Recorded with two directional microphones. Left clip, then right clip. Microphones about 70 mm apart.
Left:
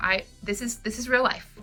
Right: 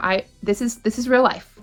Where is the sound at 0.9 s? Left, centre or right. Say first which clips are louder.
Right 6 dB; right.